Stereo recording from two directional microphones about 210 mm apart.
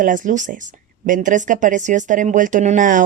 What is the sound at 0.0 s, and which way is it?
A woman's voice, 40° right (ahead or behind).